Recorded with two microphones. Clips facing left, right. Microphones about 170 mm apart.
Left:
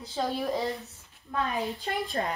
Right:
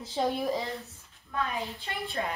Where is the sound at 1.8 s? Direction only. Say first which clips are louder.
Left 3 dB; 40° left (ahead or behind).